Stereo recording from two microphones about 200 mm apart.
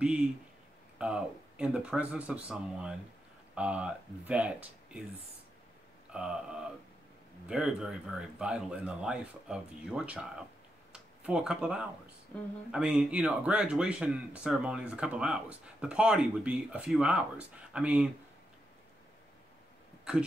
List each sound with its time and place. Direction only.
0.0 s speech: 5° right (ahead or behind)
6.1 s speech: 5° right (ahead or behind)